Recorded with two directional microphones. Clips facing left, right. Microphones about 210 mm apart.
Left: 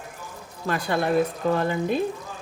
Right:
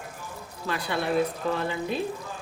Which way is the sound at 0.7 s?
45° left (ahead or behind).